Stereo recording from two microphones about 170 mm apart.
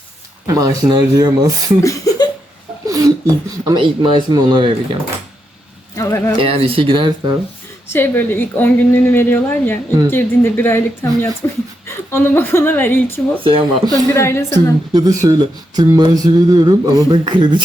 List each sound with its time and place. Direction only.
0.4 s speech: 20° right (ahead or behind)
1.8 s a sound: 20° left (ahead or behind)
2.8 s speech: 20° right (ahead or behind)
6.0 s a woman's voice: 15° left (ahead or behind)
6.4 s speech: 35° right (ahead or behind)
7.9 s a woman's voice: 10° left (ahead or behind)
13.4 s speech: 30° right (ahead or behind)
13.9 s a woman's voice: 15° left (ahead or behind)
14.9 s speech: 25° right (ahead or behind)